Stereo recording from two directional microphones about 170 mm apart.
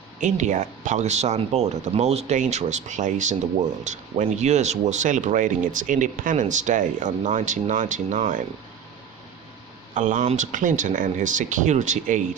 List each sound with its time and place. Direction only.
0.2 s speech: 45° right (ahead or behind)
9.9 s speech: 50° right (ahead or behind)